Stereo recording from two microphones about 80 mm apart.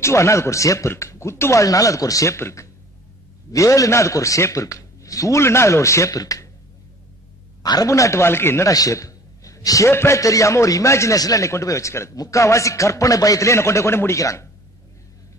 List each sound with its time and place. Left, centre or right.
0.0 s a man's voice: left
7.6 s a man's voice: left
7.9 s a man's voice: left
8.6 s a sound: left
9.8 s a man's voice: left